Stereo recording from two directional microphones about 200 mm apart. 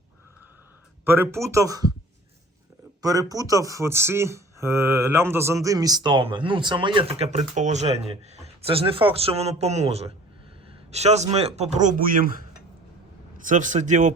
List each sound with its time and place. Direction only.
1.0 s speech: 10° right (ahead or behind)
3.0 s a man's voice: 15° right (ahead or behind); by 12.3 s 45° right (ahead or behind)
13.4 s a man's voice: 40° right (ahead or behind)